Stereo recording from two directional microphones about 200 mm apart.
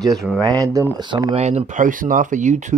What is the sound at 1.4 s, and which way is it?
Speech, 35° right (ahead or behind).